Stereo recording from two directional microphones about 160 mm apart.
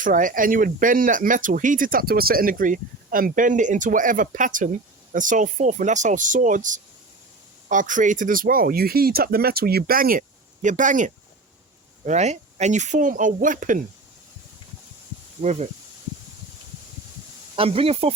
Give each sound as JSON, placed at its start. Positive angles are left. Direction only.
{"t": 0.0, "sound": "speech", "side_deg": -55}
{"t": 15.4, "sound": "speech", "side_deg": -45}
{"t": 17.6, "sound": "speech", "side_deg": -35}